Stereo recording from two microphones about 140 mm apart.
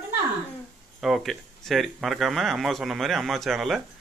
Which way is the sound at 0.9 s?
Centre (ahead or behind).